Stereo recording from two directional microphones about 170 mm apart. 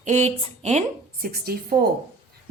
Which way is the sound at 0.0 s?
45° right (ahead or behind).